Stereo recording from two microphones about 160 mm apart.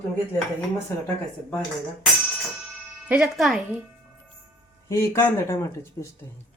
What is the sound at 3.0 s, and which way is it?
Speech, 10° right (ahead or behind).